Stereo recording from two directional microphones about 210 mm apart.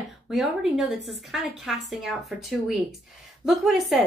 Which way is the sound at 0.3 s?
Centre (ahead or behind).